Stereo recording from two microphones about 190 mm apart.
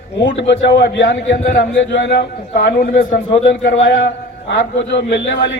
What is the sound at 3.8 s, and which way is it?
A man's voice, 65° left (ahead or behind).